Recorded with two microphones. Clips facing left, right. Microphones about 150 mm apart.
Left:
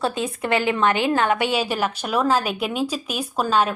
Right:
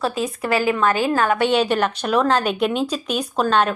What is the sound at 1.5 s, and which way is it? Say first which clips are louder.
Speech: right 4 dB; 5° left (ahead or behind).